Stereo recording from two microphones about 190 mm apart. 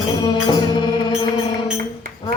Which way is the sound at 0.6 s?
25° left (ahead or behind).